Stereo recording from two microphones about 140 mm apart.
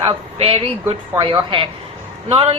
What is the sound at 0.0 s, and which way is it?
A woman's voice, 40° right (ahead or behind).